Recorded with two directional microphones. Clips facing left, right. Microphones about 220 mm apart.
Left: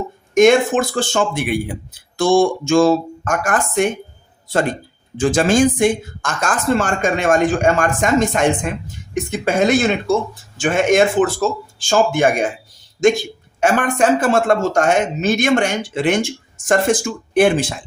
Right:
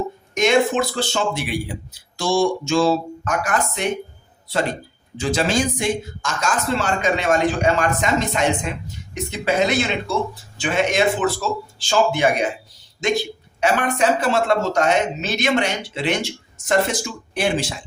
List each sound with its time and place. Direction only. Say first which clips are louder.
0.3 s speech: left 5 dB; 50° left (ahead or behind)
5.1 s speech: left 6 dB; 50° left (ahead or behind)